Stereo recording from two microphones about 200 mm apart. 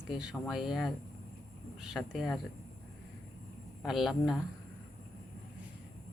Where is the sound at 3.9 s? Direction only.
Centre (ahead or behind).